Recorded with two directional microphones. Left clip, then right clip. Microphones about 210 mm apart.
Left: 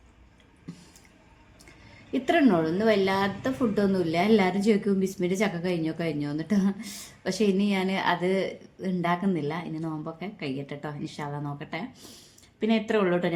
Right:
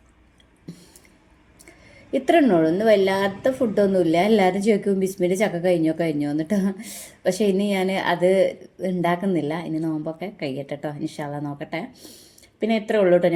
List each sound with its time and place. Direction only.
2.1 s a woman's voice: 10° right (ahead or behind)